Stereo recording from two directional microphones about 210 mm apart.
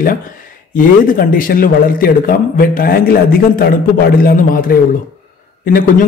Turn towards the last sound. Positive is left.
turn(degrees=40)  # may be behind; listen again after turning